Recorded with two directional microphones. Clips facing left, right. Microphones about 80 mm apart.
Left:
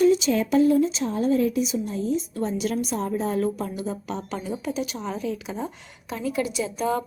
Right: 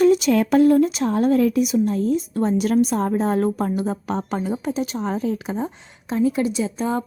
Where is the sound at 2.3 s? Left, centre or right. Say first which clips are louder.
Right 7 dB; right.